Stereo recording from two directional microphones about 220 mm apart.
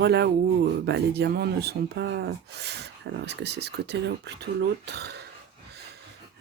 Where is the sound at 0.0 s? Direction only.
50° right (ahead or behind).